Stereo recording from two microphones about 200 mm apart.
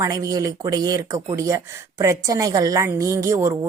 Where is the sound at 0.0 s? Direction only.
15° right (ahead or behind).